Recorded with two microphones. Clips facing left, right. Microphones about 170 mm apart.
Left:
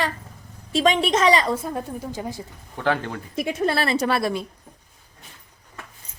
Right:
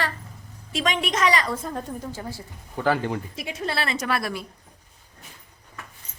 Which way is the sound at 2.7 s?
5° right (ahead or behind).